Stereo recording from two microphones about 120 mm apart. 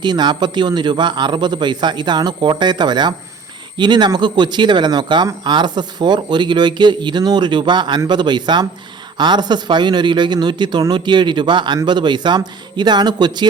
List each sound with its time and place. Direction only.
0.0 s speech: 40° right (ahead or behind)